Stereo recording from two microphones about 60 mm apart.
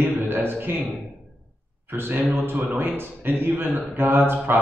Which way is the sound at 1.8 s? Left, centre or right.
Right.